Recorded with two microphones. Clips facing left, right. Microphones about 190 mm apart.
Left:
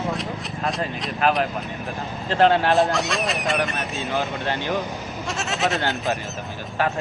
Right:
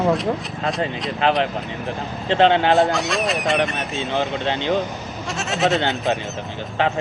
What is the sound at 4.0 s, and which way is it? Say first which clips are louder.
Speech: right 4 dB; 20° right (ahead or behind).